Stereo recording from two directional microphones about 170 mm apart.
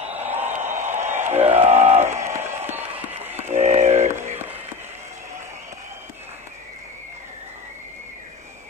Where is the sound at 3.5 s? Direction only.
40° right (ahead or behind).